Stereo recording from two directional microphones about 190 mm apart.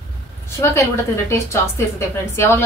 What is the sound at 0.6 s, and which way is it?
A woman's voice, 15° left (ahead or behind).